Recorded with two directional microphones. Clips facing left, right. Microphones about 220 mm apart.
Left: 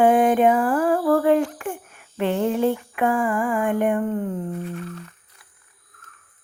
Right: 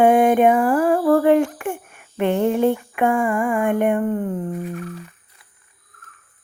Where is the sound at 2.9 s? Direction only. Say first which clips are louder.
Right 2 dB; 25° right (ahead or behind).